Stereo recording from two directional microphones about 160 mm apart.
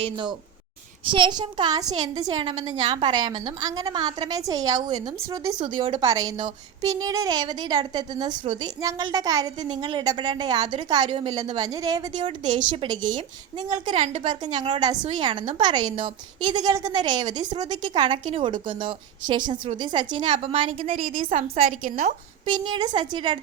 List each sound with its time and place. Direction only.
1.1 s a woman's voice: 30° right (ahead or behind)
21.3 s a woman's voice: 45° right (ahead or behind)
22.4 s a woman's voice: 25° right (ahead or behind)